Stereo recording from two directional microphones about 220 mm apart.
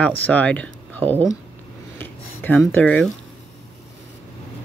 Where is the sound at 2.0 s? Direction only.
10° left (ahead or behind).